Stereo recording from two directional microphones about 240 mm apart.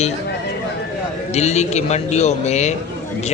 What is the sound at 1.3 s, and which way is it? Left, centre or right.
A man's voice, left.